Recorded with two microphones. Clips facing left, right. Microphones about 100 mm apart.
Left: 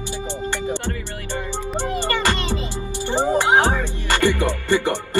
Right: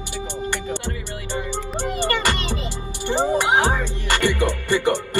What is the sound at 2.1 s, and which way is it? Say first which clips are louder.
Music: left 1 dB; 20° left (ahead or behind).